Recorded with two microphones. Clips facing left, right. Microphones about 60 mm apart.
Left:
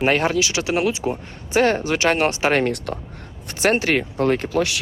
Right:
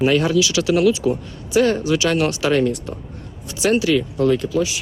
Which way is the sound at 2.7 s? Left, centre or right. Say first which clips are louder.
Left 2 dB; left.